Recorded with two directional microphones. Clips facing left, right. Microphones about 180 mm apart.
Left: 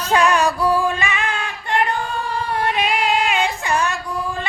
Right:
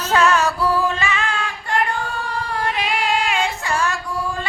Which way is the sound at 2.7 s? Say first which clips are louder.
Left 1 dB; 20° left (ahead or behind).